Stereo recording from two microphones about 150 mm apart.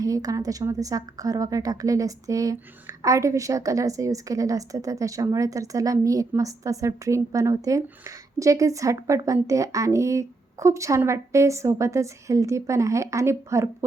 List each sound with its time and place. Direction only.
0.0 s a woman's voice: 25° right (ahead or behind)